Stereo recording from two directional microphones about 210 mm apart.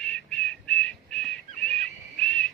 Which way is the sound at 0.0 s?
5° left (ahead or behind).